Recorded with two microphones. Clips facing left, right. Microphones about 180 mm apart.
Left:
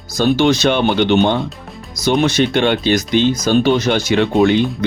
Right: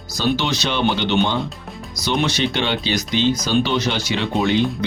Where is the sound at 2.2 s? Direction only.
50° left (ahead or behind).